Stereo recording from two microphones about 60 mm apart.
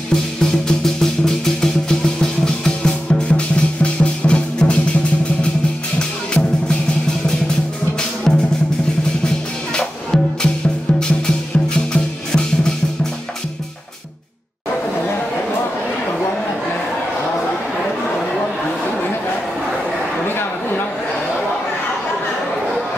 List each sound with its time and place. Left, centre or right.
0.1 s music: centre
5.9 s music: centre
8.3 s drum: centre
9.8 s music: centre